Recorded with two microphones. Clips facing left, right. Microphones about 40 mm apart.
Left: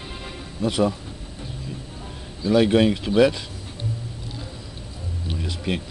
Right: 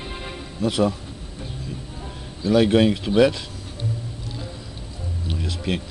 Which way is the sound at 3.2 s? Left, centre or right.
Centre.